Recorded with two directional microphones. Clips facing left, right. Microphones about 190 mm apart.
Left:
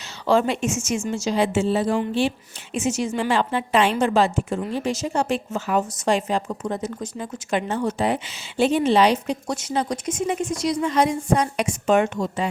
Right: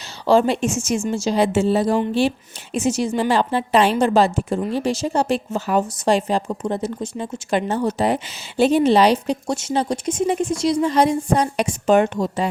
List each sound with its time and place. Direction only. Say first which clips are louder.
0.3 s a woman's voice: right 3 dB; 35° right (ahead or behind)